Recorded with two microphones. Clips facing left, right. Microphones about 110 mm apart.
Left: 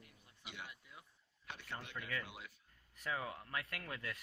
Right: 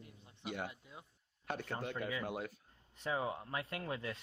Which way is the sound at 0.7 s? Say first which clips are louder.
Right 4 dB; 25° right (ahead or behind).